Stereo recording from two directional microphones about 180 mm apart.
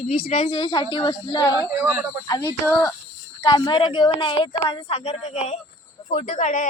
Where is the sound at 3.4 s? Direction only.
25° left (ahead or behind); by 6.6 s 45° left (ahead or behind).